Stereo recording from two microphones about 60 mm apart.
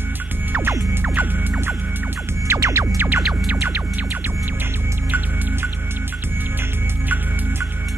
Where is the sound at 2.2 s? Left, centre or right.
Right.